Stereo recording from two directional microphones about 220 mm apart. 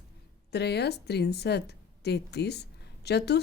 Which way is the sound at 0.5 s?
50° left (ahead or behind).